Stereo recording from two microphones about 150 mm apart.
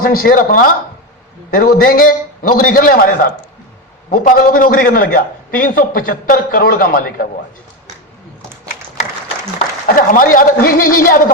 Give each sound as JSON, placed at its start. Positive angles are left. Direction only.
{"t": 0.0, "sound": "a man's voice", "side_deg": 70}
{"t": 9.8, "sound": "a man's voice", "side_deg": 65}